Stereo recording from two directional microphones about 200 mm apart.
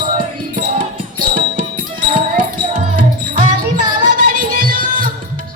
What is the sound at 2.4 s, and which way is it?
Music, 40° right (ahead or behind).